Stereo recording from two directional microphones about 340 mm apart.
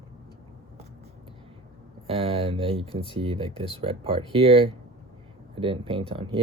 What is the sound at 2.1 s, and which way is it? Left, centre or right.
Speech, centre.